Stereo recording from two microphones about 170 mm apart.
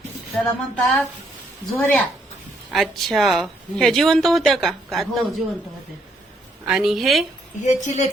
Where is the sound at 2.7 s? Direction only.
Centre (ahead or behind).